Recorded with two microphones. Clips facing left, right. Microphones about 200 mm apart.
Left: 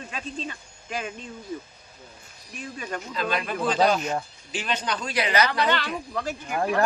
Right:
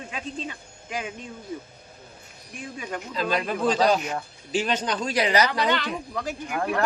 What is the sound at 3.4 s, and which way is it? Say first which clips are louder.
Speech: even; 35° right (ahead or behind).